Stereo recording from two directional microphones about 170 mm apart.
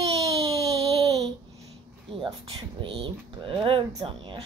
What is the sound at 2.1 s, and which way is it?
Speech, 30° right (ahead or behind).